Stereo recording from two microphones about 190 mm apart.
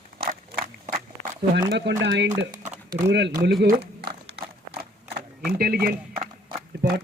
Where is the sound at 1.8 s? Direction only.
70° right (ahead or behind).